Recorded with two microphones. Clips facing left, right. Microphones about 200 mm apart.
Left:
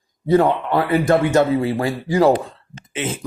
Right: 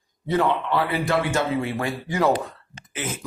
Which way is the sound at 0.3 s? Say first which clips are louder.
Left 6 dB; 40° left (ahead or behind).